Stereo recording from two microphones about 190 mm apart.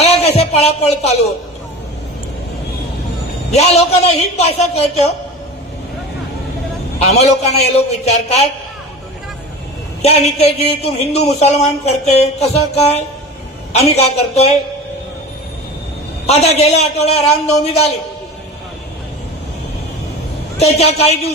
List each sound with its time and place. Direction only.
0.0 s a sound: 35° left (ahead or behind)
3.5 s speech: 35° left (ahead or behind)
7.0 s speech: 35° left (ahead or behind)
10.0 s speech: 35° left (ahead or behind)
16.2 s speech: 35° left (ahead or behind)
20.6 s speech: 35° left (ahead or behind)